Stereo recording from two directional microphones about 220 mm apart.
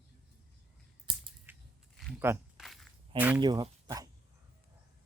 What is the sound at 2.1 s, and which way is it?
Speech, 10° right (ahead or behind).